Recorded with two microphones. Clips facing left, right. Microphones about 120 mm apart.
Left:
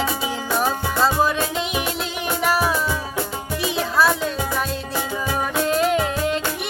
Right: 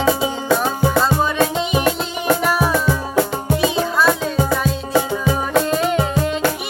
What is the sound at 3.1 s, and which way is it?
Music, 75° right (ahead or behind).